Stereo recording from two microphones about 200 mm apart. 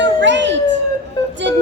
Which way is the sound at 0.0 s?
60° right (ahead or behind).